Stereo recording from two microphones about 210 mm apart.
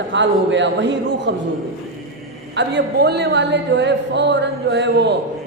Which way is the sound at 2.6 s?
55° right (ahead or behind).